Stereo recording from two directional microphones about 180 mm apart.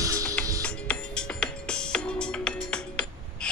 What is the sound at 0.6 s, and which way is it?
Music, 5° left (ahead or behind).